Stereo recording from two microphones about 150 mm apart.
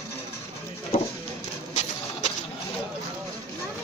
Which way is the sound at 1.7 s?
50° left (ahead or behind).